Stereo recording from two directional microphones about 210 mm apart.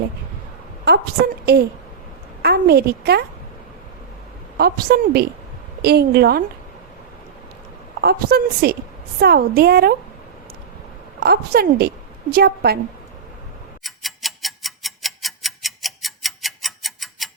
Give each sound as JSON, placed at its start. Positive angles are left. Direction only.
{"t": 0.9, "sound": "a woman's voice", "side_deg": -50}
{"t": 4.5, "sound": "a woman's voice", "side_deg": -45}
{"t": 8.0, "sound": "a woman's voice", "side_deg": -50}
{"t": 11.2, "sound": "a woman's voice", "side_deg": -45}
{"t": 13.8, "sound": "tick-tock", "side_deg": 0}